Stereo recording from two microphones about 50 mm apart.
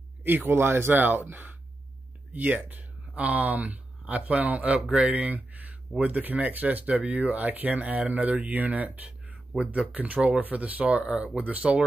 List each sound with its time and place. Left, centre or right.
0.2 s speech: right